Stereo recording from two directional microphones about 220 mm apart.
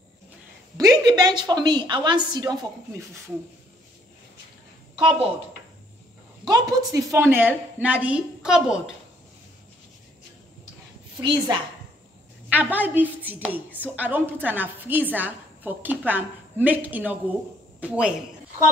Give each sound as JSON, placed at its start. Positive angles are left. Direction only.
{"t": 0.7, "sound": "a woman's voice", "side_deg": -15}
{"t": 6.4, "sound": "a woman's voice", "side_deg": -15}
{"t": 11.1, "sound": "a woman's voice", "side_deg": -20}
{"t": 12.4, "sound": "a woman's voice", "side_deg": -5}